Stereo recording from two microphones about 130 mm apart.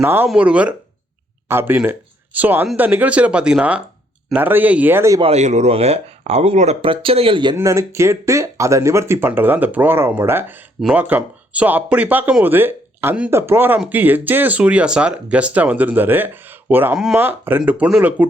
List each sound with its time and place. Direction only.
0.0 s speech: 15° right (ahead or behind)
5.2 s speech: 60° right (ahead or behind); by 7.5 s 40° right (ahead or behind)
7.5 s speech: 25° right (ahead or behind)
10.8 s speech: centre (ahead or behind)
11.0 s speech: 15° right (ahead or behind)